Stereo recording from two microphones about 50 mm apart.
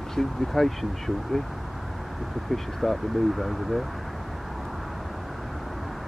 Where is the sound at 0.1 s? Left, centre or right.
Centre.